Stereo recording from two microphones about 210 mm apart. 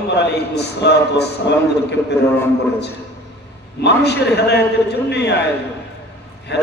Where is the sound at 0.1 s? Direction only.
55° left (ahead or behind).